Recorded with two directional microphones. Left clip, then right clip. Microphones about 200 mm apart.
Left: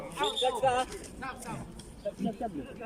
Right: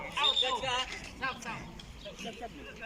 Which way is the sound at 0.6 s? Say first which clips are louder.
Left 5 dB; 55° left (ahead or behind).